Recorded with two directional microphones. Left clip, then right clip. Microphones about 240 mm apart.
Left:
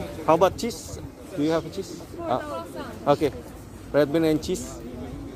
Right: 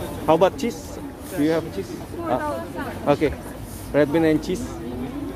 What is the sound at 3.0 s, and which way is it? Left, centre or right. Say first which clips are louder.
Speech: right 1 dB; left.